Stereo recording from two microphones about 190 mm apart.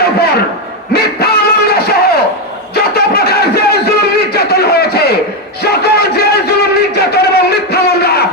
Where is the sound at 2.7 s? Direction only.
55° left (ahead or behind).